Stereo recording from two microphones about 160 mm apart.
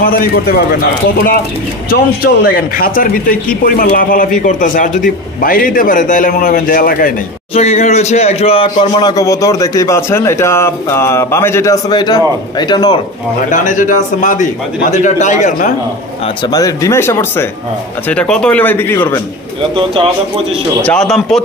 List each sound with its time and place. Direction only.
0.0 s a man's voice: 65° left (ahead or behind)
1.9 s a man's voice: 70° left (ahead or behind)
7.5 s speech: 40° left (ahead or behind)
9.1 s a man's voice: 20° left (ahead or behind)
13.5 s a man's voice: 55° left (ahead or behind)
16.4 s speech: 20° left (ahead or behind)
19.7 s speech: 35° right (ahead or behind)
20.8 s a man's voice: 5° left (ahead or behind)